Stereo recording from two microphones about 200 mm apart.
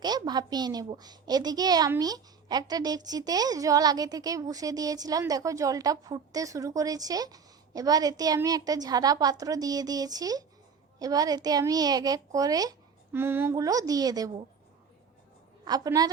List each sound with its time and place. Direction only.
0.0 s a woman's voice: 20° right (ahead or behind)
15.6 s a woman's voice: 20° right (ahead or behind)